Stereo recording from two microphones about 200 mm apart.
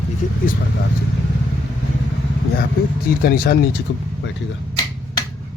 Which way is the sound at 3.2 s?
50° left (ahead or behind).